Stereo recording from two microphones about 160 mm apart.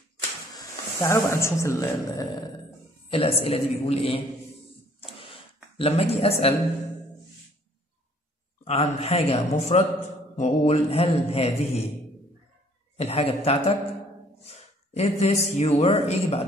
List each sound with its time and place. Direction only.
0.6 s speech: 20° left (ahead or behind)
3.1 s mantra: 35° left (ahead or behind)
5.2 s a sound: 35° left (ahead or behind)
8.6 s mantra: 40° left (ahead or behind)
12.9 s mantra: 40° left (ahead or behind)
14.4 s a man's voice: 40° left (ahead or behind)